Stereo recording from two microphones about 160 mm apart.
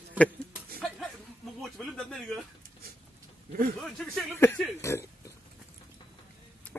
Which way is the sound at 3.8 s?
Centre (ahead or behind).